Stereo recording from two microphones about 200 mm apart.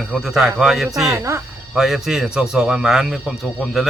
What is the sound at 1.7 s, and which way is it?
Speech, centre (ahead or behind).